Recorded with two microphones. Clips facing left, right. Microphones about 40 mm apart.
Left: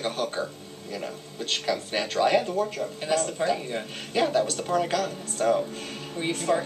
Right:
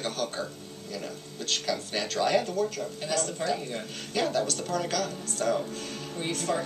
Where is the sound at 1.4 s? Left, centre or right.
Centre.